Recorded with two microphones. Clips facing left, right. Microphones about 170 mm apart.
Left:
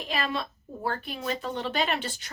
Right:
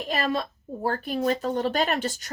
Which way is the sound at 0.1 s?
40° right (ahead or behind).